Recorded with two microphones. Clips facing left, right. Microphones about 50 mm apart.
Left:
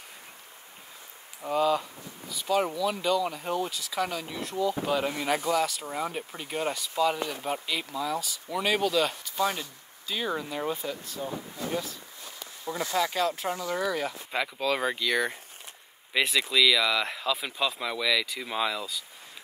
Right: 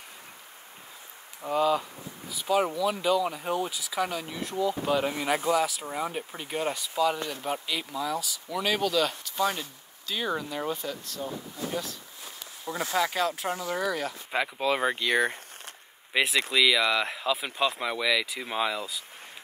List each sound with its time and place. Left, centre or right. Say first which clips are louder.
1.4 s speech: even; centre
12.9 s speech: even; centre
14.3 s speech: right 2 dB; centre